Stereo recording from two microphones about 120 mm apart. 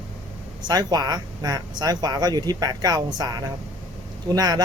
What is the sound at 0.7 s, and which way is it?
Speech, 35° right (ahead or behind).